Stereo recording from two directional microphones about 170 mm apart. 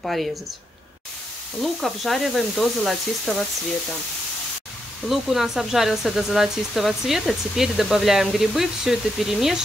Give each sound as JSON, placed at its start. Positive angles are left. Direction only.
{"t": 0.0, "sound": "speech", "side_deg": 0}
{"t": 1.6, "sound": "speech", "side_deg": 0}
{"t": 5.0, "sound": "speech", "side_deg": 0}